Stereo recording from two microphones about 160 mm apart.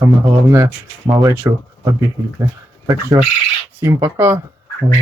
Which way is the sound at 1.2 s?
20° right (ahead or behind).